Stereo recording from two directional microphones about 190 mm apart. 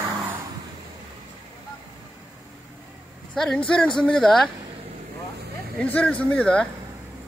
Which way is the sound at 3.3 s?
5° left (ahead or behind).